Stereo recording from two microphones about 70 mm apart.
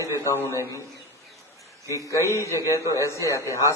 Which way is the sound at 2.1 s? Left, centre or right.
Left.